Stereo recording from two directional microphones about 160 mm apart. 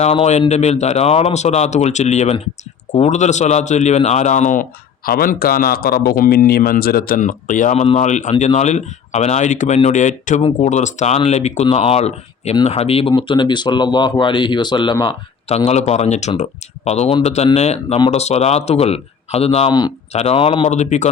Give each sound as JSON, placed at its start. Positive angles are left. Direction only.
{"t": 0.0, "sound": "speech", "side_deg": 45}
{"t": 5.0, "sound": "a man's voice", "side_deg": 65}